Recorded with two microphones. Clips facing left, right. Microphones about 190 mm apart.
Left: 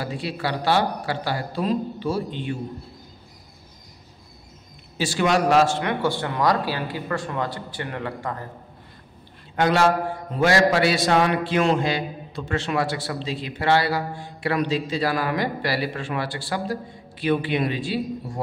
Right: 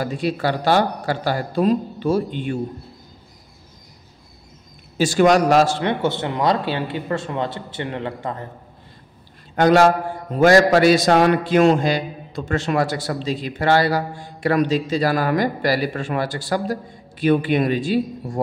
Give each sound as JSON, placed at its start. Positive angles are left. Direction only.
{"t": 0.0, "sound": "a man's voice", "side_deg": -45}
{"t": 4.9, "sound": "a man's voice", "side_deg": -45}
{"t": 9.6, "sound": "a man's voice", "side_deg": -45}